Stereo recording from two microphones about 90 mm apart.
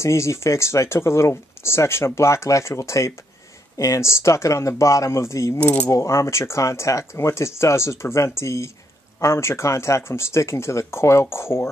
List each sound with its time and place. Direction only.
0.0 s speech: 30° left (ahead or behind)
5.6 s keys jangling: 15° left (ahead or behind)
5.9 s speech: 35° left (ahead or behind)